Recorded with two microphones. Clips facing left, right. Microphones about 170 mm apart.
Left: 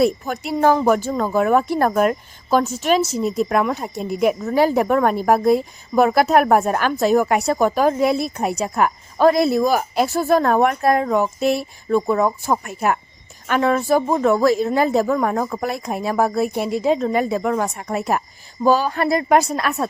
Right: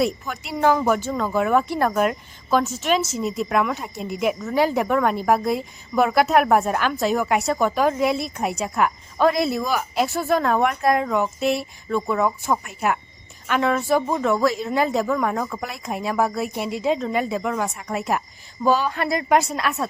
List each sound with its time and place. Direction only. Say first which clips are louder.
0.0 s speech: left 5 dB; 45° left (ahead or behind)